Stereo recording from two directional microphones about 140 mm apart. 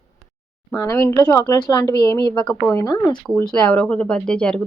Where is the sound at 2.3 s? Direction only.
10° left (ahead or behind).